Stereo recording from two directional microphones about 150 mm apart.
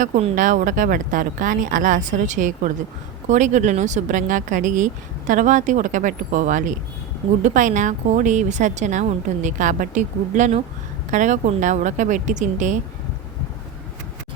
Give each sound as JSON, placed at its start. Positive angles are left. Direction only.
{"t": 0.3, "sound": "speech", "side_deg": -60}